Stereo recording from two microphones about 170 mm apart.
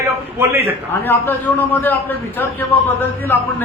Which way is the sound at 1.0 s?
10° left (ahead or behind).